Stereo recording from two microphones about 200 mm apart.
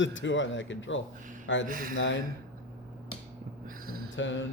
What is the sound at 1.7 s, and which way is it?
Speech, 45° right (ahead or behind).